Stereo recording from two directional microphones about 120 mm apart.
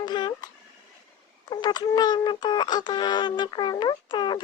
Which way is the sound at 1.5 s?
35° left (ahead or behind).